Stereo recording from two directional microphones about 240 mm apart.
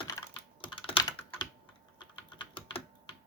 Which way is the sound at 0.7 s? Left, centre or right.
Left.